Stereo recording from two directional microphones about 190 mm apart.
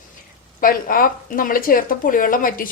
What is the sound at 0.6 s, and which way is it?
Speech, 45° left (ahead or behind).